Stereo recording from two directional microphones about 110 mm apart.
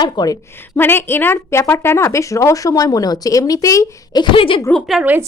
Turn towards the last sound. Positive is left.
turn(degrees=0)  # may be behind; listen again after turning